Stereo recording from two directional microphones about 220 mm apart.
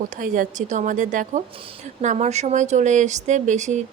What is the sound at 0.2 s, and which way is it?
Speech, 35° right (ahead or behind).